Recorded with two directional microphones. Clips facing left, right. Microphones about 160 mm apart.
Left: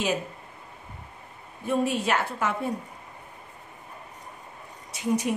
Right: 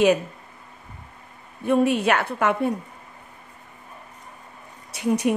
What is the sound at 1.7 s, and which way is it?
A woman's voice, 65° right (ahead or behind).